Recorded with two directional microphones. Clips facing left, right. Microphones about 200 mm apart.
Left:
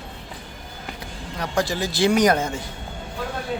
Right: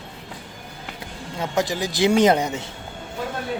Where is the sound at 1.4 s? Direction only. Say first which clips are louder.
Right 1 dB; 20° right (ahead or behind).